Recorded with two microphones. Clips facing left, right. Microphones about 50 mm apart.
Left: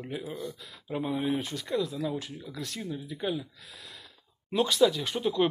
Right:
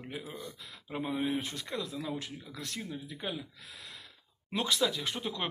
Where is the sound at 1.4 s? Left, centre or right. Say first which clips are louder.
Left 6 dB; right.